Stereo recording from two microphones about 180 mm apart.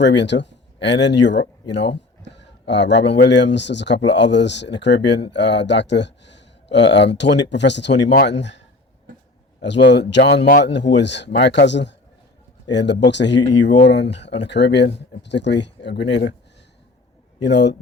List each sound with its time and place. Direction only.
0.0 s speech: 75° left (ahead or behind)
17.4 s speech: 75° left (ahead or behind)